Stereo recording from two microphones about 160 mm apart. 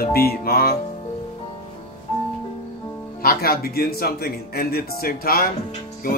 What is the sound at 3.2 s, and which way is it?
Speech, 65° left (ahead or behind).